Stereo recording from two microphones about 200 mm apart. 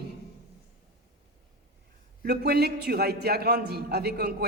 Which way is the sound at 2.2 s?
55° right (ahead or behind).